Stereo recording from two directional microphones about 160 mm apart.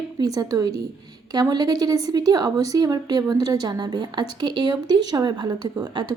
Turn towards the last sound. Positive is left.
turn(degrees=-25)  # may be behind; listen again after turning